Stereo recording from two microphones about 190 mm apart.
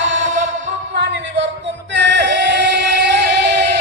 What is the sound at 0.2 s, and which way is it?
Music, 40° right (ahead or behind).